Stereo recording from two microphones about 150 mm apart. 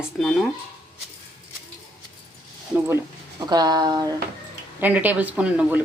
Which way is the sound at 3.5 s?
25° right (ahead or behind).